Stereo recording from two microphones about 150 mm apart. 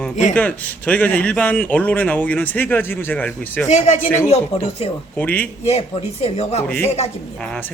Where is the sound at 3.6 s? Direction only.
50° left (ahead or behind).